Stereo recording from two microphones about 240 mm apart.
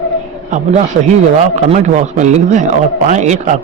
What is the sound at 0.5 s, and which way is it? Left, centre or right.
Speech, right.